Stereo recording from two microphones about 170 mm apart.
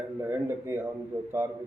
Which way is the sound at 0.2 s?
15° right (ahead or behind).